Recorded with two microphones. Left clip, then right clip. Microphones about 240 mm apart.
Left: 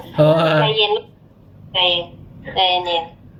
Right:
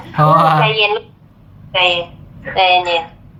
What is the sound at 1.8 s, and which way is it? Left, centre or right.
A woman's voice, centre.